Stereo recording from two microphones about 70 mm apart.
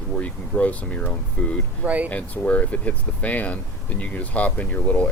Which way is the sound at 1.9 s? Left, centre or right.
Right.